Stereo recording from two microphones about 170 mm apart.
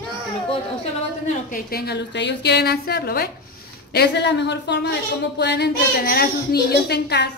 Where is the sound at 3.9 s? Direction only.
80° left.